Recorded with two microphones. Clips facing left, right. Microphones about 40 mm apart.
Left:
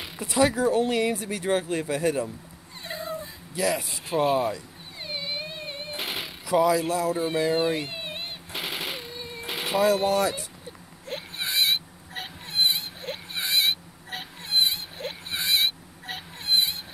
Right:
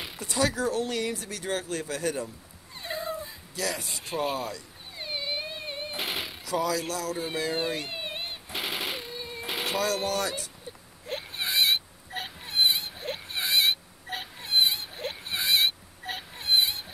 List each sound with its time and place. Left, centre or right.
0.2 s speech: centre
2.8 s dog: centre
3.5 s speech: centre
3.8 s speech: centre
4.4 s speech: centre
4.9 s music: centre
6.4 s speech: centre
7.2 s machine gun: centre
9.8 s speech: centre
11.1 s baby cry: centre